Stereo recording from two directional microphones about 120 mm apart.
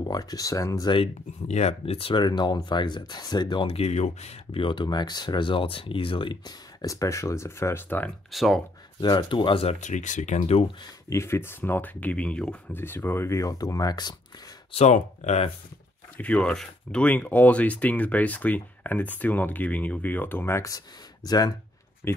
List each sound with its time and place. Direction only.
0.0 s speech: 35° left (ahead or behind)
0.9 s speech: 65° left (ahead or behind)
2.2 s speech: 35° left (ahead or behind)
3.6 s speech: 60° left (ahead or behind)
4.5 s speech: 45° left (ahead or behind); by 8.1 s 15° left (ahead or behind)
8.3 s speech: centre (ahead or behind)
9.0 s speech: 40° left (ahead or behind)
9.8 s speech: 90° left; by 10.7 s 65° left (ahead or behind)
11.1 s speech: 20° left (ahead or behind)
14.7 s speech: 70° left (ahead or behind)
16.2 s speech: 10° left (ahead or behind); by 21.5 s 35° left (ahead or behind)
22.0 s speech: 20° left (ahead or behind)